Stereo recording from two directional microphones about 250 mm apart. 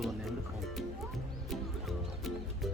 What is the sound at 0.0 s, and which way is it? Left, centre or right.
Music, centre.